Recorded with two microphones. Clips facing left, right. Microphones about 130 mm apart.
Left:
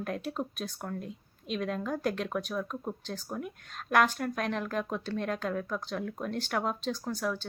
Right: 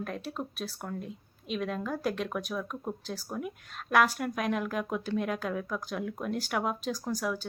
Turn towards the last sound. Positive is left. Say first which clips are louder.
# right 1 dB
turn(degrees=-10)  # may be behind; listen again after turning